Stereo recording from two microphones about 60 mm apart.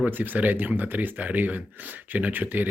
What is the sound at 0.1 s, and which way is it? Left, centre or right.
Speech, right.